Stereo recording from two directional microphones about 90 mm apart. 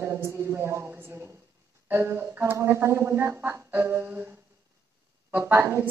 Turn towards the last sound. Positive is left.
turn(degrees=-25)  # may be behind; listen again after turning